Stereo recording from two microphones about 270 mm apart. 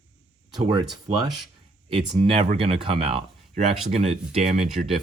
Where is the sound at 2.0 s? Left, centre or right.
Right.